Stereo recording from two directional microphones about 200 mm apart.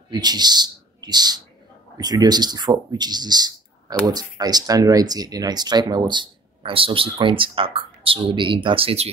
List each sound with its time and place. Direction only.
0.1 s speech: 20° right (ahead or behind)